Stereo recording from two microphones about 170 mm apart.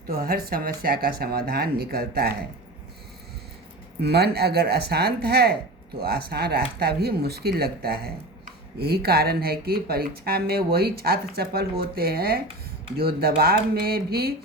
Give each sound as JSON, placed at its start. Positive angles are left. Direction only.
{"t": 0.1, "sound": "speech", "side_deg": -60}
{"t": 4.0, "sound": "speech", "side_deg": -70}